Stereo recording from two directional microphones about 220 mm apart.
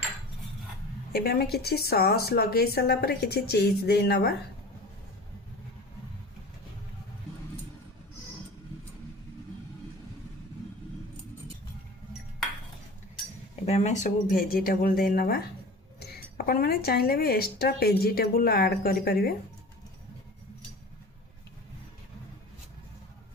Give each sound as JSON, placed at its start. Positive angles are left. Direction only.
{"t": 1.1, "sound": "speech", "side_deg": 45}
{"t": 13.7, "sound": "speech", "side_deg": 30}